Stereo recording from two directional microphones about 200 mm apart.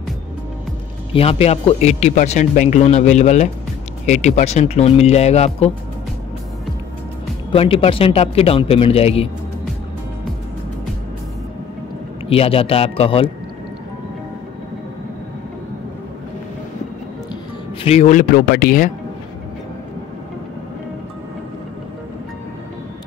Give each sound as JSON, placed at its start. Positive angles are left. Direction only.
{"t": 1.1, "sound": "speech", "side_deg": 30}
{"t": 7.5, "sound": "a man's voice", "side_deg": 30}
{"t": 12.3, "sound": "a man's voice", "side_deg": 30}
{"t": 17.8, "sound": "speech", "side_deg": 35}